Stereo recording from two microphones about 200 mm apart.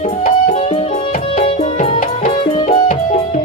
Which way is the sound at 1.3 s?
30° left (ahead or behind).